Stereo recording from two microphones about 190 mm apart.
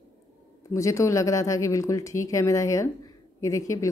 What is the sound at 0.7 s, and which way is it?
Speech, 15° left (ahead or behind).